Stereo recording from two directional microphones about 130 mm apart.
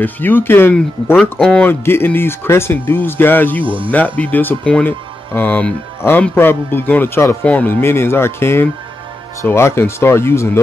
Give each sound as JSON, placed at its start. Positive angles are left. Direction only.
{"t": 0.0, "sound": "speech", "side_deg": 15}
{"t": 3.6, "sound": "speech", "side_deg": -40}
{"t": 4.2, "sound": "speech", "side_deg": 15}